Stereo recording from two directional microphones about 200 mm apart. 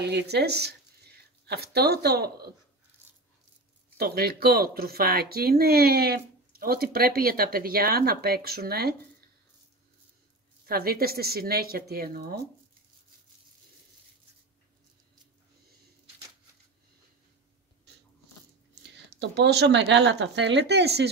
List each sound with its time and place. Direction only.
0.0 s speech: 55° right (ahead or behind)
4.0 s speech: 50° right (ahead or behind)
10.6 s speech: 50° right (ahead or behind)
18.8 s speech: 60° right (ahead or behind)